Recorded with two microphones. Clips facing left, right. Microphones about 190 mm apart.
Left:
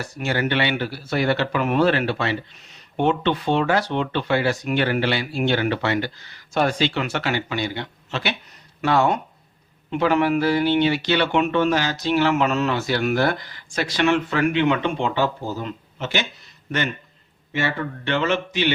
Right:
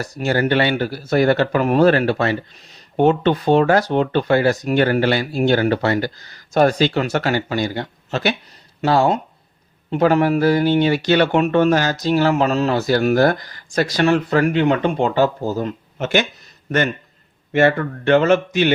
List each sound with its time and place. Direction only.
0.0 s speech: 40° right (ahead or behind)
8.8 s speech: 30° right (ahead or behind); by 16.2 s 50° right (ahead or behind)
17.5 s speech: 50° right (ahead or behind)